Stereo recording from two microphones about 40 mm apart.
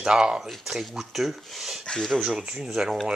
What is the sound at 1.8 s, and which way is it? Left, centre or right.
Speech, centre.